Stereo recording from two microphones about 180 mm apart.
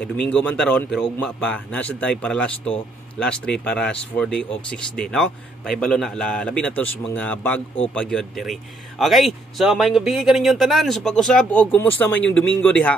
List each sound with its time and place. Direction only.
0.0 s speech: 5° left (ahead or behind)